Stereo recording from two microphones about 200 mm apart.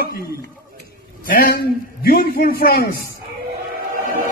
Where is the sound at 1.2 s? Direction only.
45° left (ahead or behind).